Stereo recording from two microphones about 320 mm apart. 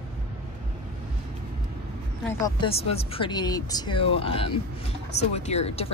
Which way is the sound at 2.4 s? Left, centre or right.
Centre.